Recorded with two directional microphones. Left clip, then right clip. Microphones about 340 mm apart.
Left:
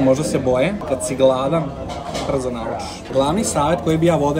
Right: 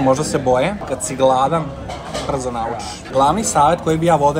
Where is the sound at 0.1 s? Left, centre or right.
Centre.